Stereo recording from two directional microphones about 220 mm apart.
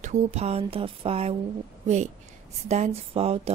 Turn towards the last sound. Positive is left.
turn(degrees=-25)  # may be behind; listen again after turning